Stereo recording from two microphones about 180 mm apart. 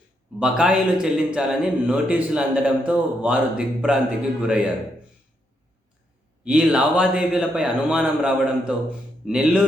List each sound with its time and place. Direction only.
0.3 s a man's voice: 5° right (ahead or behind)
6.4 s a man's voice: 5° right (ahead or behind)